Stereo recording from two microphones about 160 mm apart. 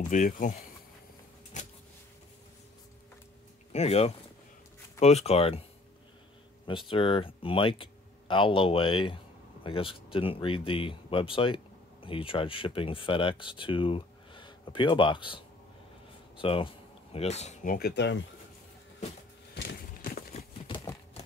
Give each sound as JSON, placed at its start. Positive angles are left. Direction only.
{"t": 0.1, "sound": "speech", "side_deg": 55}
{"t": 3.7, "sound": "speech", "side_deg": 40}
{"t": 6.9, "sound": "speech", "side_deg": 35}
{"t": 19.5, "sound": "horse", "side_deg": 85}
{"t": 20.6, "sound": "typewriter", "side_deg": 30}